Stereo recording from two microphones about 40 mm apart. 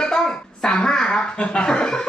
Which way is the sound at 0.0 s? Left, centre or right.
Centre.